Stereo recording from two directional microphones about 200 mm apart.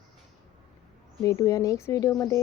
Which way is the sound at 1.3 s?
15° left (ahead or behind).